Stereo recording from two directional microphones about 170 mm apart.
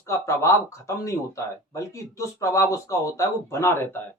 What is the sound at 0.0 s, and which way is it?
Speech, 15° left (ahead or behind).